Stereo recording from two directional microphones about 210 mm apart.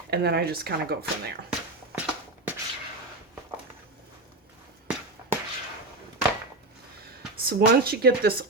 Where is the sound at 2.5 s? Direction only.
10° right (ahead or behind).